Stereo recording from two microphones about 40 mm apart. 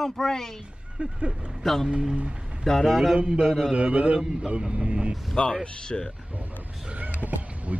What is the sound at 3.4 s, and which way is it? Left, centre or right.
Speech, centre.